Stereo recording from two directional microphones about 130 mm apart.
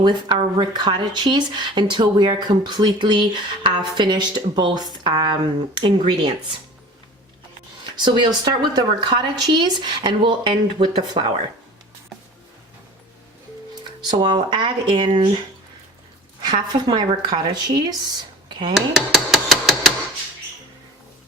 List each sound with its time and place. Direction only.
0.0 s speech: 35° right (ahead or behind)
8.0 s speech: 35° right (ahead or behind)
14.0 s speech: 35° right (ahead or behind)
16.4 s speech: 35° right (ahead or behind)
18.7 s dishes: centre (ahead or behind)